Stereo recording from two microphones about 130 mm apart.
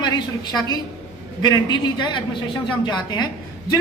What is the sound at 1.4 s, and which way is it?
A woman's voice, 35° left (ahead or behind).